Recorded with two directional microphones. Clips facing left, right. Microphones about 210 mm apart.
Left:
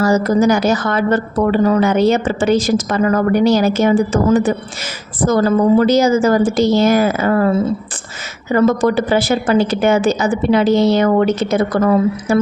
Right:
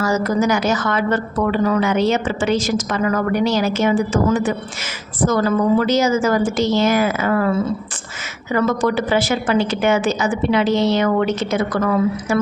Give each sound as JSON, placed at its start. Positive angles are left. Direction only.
{"t": 0.0, "sound": "a woman's voice", "side_deg": 35}